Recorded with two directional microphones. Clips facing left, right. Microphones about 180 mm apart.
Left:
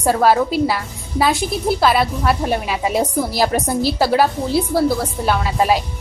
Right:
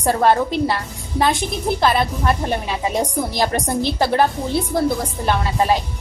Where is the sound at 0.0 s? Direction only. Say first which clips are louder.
Left 1 dB; 5° left (ahead or behind).